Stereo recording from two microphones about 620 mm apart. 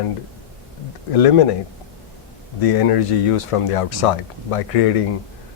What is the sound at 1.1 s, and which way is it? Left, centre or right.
Speech, left.